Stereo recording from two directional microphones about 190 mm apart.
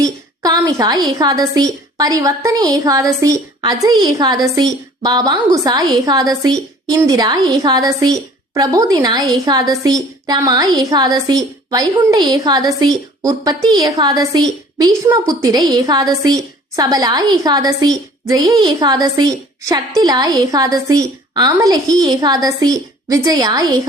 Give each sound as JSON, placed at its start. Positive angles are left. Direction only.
{"t": 0.0, "sound": "a woman's voice", "side_deg": -20}